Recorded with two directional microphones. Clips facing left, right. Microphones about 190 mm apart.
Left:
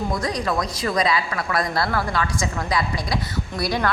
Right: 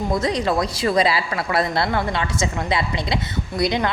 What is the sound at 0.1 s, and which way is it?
A woman's voice, 25° right (ahead or behind).